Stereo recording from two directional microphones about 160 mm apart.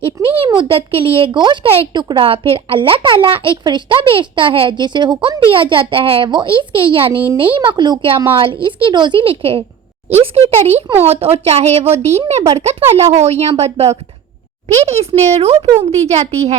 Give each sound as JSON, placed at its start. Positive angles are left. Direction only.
{"t": 0.0, "sound": "speech", "side_deg": -35}